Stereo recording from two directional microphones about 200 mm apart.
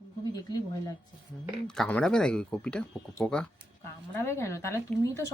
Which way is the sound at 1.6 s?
5° left (ahead or behind).